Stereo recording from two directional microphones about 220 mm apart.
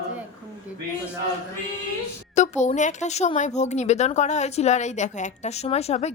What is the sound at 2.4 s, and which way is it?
Speech, 30° left (ahead or behind).